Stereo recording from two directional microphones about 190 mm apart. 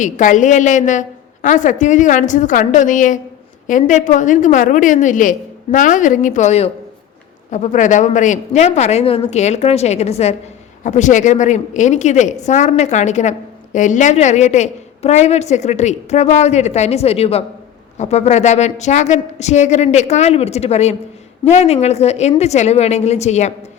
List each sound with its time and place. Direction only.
0.0 s a woman's voice: 40° left (ahead or behind)